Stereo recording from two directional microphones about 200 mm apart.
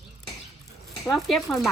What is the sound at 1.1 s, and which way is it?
Speech, centre (ahead or behind).